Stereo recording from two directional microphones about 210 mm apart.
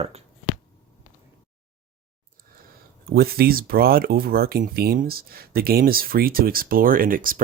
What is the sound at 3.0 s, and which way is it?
Speech, 45° right (ahead or behind).